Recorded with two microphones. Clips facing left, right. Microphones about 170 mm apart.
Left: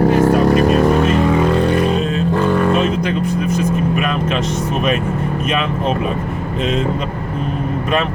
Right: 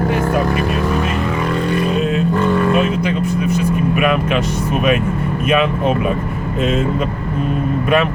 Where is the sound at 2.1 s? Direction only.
30° left (ahead or behind).